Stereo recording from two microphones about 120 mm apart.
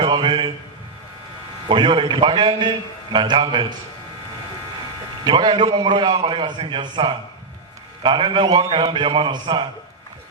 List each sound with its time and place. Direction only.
0.0 s a sound: 40° right (ahead or behind)
1.6 s a man's voice: 40° right (ahead or behind)
5.2 s a man's voice: 40° right (ahead or behind)